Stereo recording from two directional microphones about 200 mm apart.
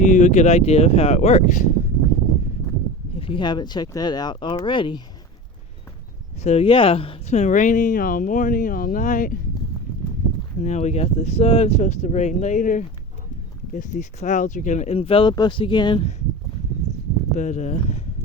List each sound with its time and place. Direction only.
0.0 s speech: 35° left (ahead or behind)
3.2 s speech: 25° left (ahead or behind)
6.4 s speech: 30° left (ahead or behind)
10.6 s speech: 35° left (ahead or behind)
17.3 s speech: 35° left (ahead or behind)